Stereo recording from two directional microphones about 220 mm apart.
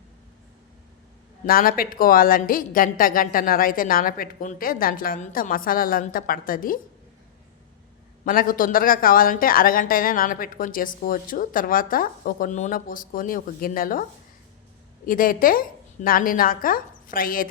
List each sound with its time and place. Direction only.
1.5 s speech: 40° left (ahead or behind)
8.2 s speech: 40° left (ahead or behind)
15.0 s speech: 40° left (ahead or behind)